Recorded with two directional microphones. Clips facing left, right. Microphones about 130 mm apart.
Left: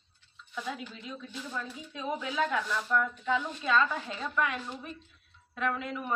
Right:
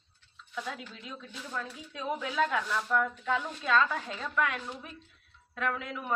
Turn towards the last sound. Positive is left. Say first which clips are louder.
# left 1 dB
turn(degrees=0)  # may be behind; listen again after turning